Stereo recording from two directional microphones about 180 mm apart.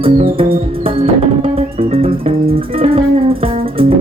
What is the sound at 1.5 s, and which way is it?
Music, 30° right (ahead or behind).